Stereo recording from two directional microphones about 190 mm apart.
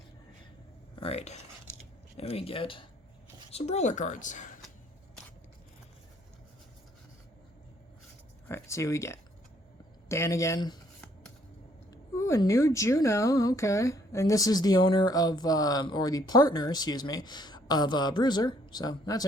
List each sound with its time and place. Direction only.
0.9 s a woman's voice: 30° left (ahead or behind)
8.4 s speech: 15° left (ahead or behind)
12.1 s a woman's voice: 15° left (ahead or behind)